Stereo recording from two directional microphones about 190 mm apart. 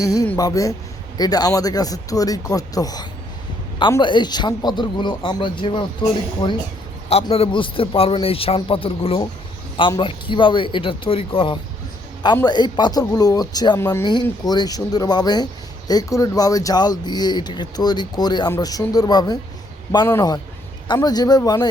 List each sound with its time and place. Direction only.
0.0 s speech: 20° left (ahead or behind)